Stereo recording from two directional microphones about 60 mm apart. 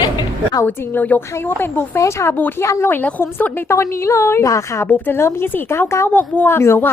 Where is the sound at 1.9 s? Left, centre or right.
Left.